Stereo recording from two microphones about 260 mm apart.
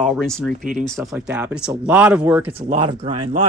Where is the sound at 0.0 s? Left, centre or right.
Centre.